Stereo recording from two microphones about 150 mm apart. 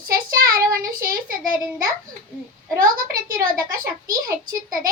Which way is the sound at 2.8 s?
70° right (ahead or behind).